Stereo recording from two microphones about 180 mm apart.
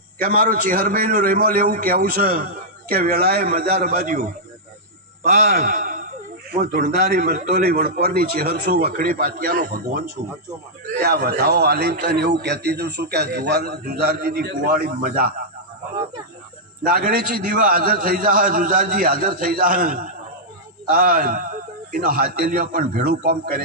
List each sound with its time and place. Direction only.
0.2 s a man's voice: 55° right (ahead or behind)
5.5 s a man's voice: 55° right (ahead or behind)
6.5 s a man's voice: 60° right (ahead or behind)
11.0 s a man's voice: 60° right (ahead or behind)
16.9 s a man's voice: 50° right (ahead or behind)